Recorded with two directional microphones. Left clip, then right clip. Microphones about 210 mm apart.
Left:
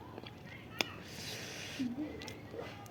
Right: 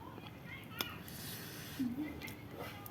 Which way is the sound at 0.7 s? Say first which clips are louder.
Left 6 dB; 25° left (ahead or behind).